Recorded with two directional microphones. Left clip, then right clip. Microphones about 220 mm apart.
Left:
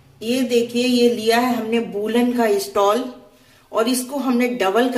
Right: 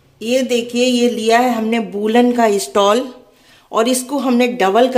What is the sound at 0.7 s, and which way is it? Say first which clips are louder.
Speech: right 2 dB; 50° right (ahead or behind).